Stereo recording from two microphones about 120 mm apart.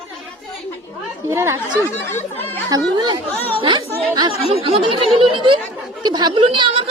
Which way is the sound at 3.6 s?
45° right (ahead or behind).